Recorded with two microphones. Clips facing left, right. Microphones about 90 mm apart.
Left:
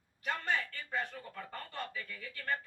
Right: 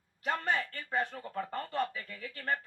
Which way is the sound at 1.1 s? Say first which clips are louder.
Right 8 dB; 40° right (ahead or behind).